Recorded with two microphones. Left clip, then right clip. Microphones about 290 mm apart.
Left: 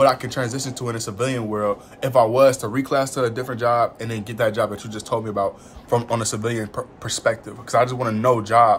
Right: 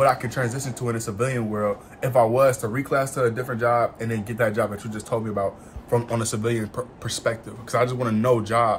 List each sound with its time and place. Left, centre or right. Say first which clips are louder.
0.0 s speech: left 3 dB; centre
0.5 s speech: left 1 dB; centre